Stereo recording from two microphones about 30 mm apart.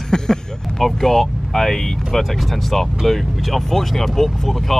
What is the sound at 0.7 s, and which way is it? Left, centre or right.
Speech, centre.